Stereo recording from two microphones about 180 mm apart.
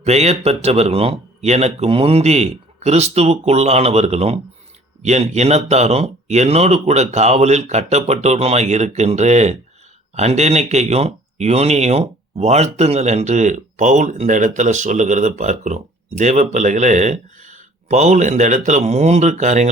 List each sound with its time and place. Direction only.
0.0 s speech: 35° right (ahead or behind)